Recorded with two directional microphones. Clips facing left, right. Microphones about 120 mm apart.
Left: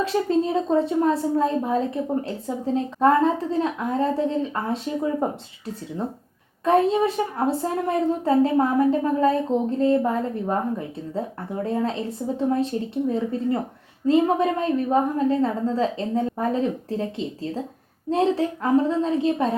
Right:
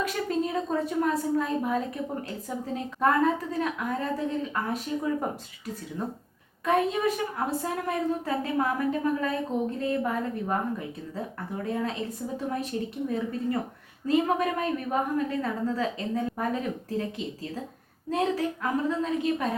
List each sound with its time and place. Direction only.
0.0 s a woman's voice: 30° left (ahead or behind)
6.7 s a woman's voice: 30° left (ahead or behind)